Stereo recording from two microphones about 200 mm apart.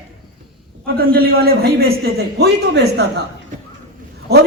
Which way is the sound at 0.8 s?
50° right (ahead or behind).